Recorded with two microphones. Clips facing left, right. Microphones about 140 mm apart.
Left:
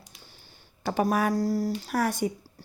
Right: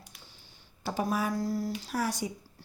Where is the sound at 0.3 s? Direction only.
60° left (ahead or behind).